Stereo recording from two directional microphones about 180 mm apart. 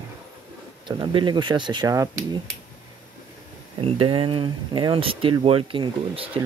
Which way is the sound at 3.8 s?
30° right (ahead or behind).